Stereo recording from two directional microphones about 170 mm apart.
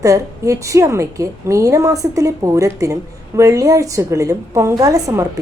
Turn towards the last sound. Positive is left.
turn(degrees=-20)  # may be behind; listen again after turning